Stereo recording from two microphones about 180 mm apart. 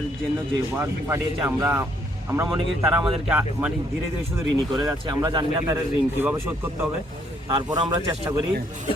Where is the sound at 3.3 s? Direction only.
10° right (ahead or behind).